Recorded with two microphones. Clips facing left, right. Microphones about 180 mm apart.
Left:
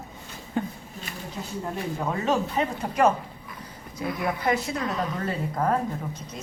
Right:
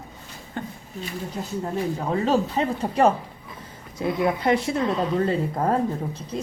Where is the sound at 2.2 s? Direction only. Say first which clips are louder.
Right 3 dB; 30° right (ahead or behind).